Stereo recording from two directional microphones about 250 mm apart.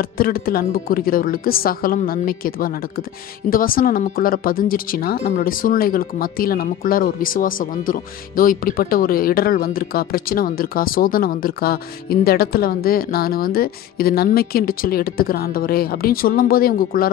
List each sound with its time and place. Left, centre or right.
0.0 s a woman's voice: left